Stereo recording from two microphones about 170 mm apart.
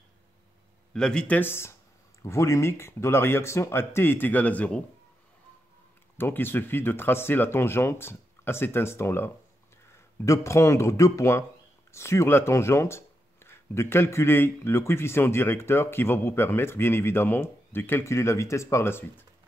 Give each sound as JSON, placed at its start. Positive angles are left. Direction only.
{"t": 0.9, "sound": "speech", "side_deg": 5}
{"t": 6.1, "sound": "speech", "side_deg": 15}